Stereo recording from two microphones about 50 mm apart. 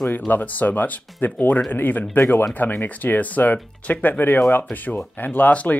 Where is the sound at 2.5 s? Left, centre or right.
Left.